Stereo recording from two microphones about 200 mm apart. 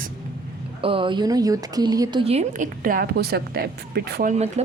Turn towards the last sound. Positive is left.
turn(degrees=-35)  # may be behind; listen again after turning